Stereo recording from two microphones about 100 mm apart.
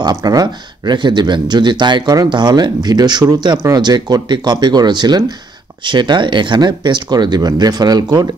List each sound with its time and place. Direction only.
0.0 s speech: 40° right (ahead or behind)
3.5 s speech: 30° right (ahead or behind)
3.8 s speech: 45° right (ahead or behind)